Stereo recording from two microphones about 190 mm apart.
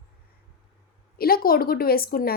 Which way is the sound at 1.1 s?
50° left (ahead or behind).